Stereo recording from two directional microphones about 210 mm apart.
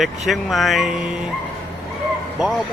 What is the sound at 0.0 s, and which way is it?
Speech, centre (ahead or behind).